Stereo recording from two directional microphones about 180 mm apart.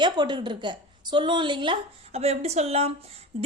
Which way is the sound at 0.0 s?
25° right (ahead or behind).